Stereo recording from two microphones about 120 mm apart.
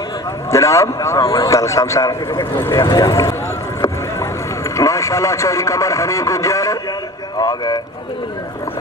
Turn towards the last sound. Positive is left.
turn(degrees=35)  # may be behind; listen again after turning